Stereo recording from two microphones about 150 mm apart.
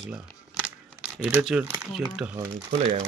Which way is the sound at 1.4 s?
Centre (ahead or behind).